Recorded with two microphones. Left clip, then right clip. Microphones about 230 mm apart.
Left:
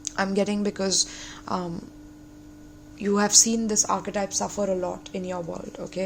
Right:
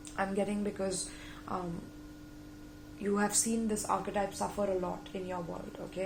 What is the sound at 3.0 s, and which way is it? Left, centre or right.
A woman's voice, left.